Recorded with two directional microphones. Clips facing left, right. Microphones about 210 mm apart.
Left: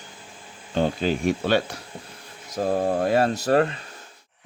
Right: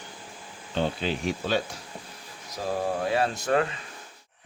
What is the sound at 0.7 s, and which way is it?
Speech, 45° left (ahead or behind).